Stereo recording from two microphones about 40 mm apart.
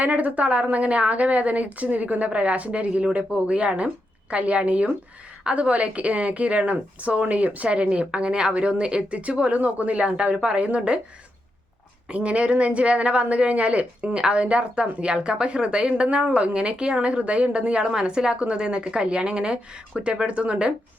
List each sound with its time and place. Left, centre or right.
0.0 s a woman's voice: right
12.1 s speech: right